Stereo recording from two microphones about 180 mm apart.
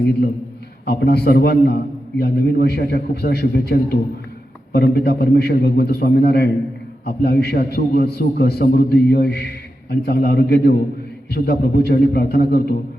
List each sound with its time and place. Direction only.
0.9 s a man's voice: 60° left (ahead or behind)